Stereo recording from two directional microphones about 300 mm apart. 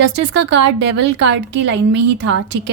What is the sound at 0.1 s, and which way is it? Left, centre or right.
A woman's voice, right.